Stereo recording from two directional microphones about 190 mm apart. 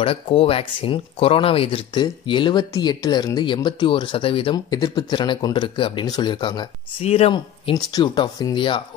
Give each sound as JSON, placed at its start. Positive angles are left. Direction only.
{"t": 0.0, "sound": "speech", "side_deg": 30}